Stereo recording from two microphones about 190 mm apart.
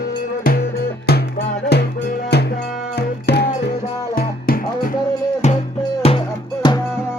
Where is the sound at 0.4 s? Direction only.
55° left (ahead or behind).